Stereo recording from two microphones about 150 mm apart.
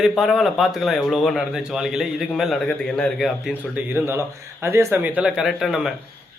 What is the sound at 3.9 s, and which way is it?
Speech, 15° right (ahead or behind).